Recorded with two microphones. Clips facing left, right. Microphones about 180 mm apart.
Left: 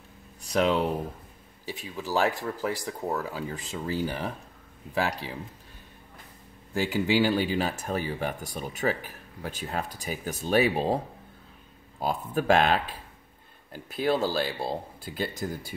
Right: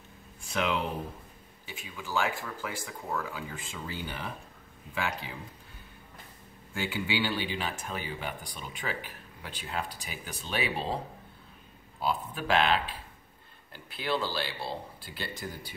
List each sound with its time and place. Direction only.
0.4 s speech: 35° left (ahead or behind)
6.7 s speech: 40° left (ahead or behind)
12.0 s speech: 45° left (ahead or behind)